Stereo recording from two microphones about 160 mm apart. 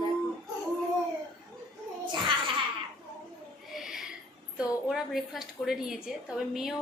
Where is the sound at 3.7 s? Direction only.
Centre (ahead or behind).